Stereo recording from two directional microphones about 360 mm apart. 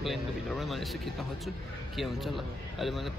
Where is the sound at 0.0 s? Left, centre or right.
Centre.